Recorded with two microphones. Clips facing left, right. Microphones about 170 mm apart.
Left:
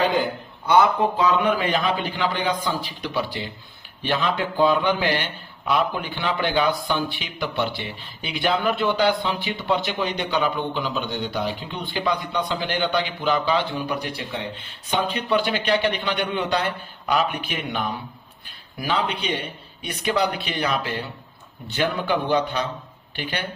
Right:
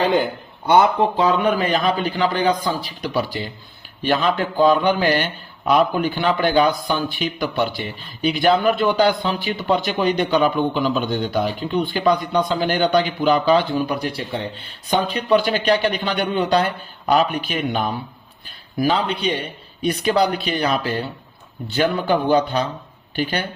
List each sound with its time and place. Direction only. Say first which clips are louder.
0.7 s a man's voice: right 3 dB; 30° right (ahead or behind)